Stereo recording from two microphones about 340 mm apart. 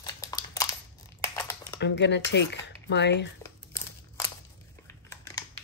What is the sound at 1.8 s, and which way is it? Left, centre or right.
Speech, left.